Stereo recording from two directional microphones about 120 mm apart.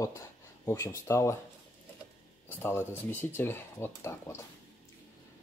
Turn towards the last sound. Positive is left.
turn(degrees=20)  # may be behind; listen again after turning